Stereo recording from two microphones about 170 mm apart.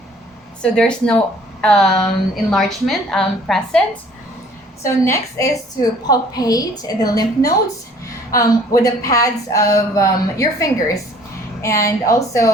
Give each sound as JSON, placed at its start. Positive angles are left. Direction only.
{"t": 0.6, "sound": "a woman's voice", "side_deg": 5}
{"t": 4.8, "sound": "a woman's voice", "side_deg": 15}